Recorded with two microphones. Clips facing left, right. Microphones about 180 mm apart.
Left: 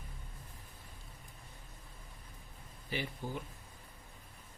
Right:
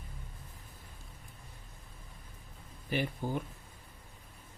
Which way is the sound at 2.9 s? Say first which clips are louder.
Right 6 dB; 55° right (ahead or behind).